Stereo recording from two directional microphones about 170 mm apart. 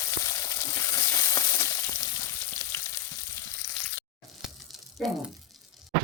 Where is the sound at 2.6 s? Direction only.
20° left (ahead or behind).